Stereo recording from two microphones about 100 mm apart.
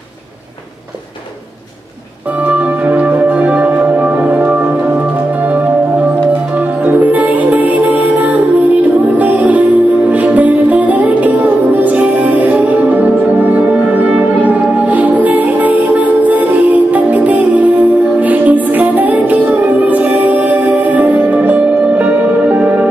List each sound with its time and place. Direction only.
2.4 s music: 15° right (ahead or behind)
6.8 s music: 15° right (ahead or behind)